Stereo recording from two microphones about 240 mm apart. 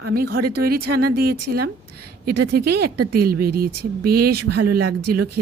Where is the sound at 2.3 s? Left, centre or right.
Right.